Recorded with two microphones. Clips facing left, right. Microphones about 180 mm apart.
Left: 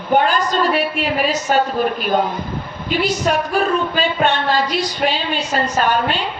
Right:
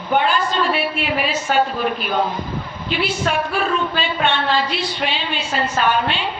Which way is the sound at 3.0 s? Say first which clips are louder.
Left 3 dB; 40° left (ahead or behind).